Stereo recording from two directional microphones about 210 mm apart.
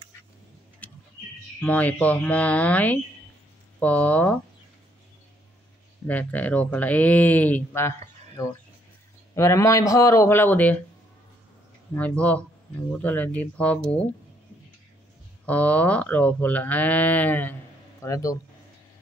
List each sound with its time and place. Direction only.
0.8 s vehicle: 5° left (ahead or behind)
1.6 s speech: 5° left (ahead or behind)
6.0 s speech: 5° left (ahead or behind)
9.3 s speech: 15° left (ahead or behind)
11.9 s speech: 5° left (ahead or behind)
15.4 s speech: 5° left (ahead or behind)